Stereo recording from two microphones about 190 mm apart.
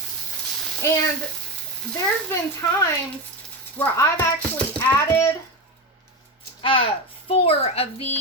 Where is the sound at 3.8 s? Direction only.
10° left (ahead or behind).